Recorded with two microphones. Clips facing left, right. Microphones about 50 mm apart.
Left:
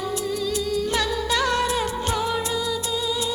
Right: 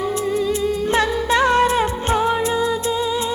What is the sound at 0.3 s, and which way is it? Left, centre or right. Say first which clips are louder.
Music: right 6 dB; right.